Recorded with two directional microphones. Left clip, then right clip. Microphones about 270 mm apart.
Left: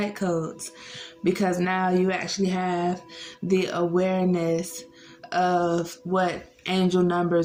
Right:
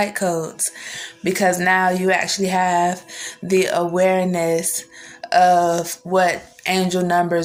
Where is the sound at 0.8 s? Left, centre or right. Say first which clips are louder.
Right 1 dB; centre.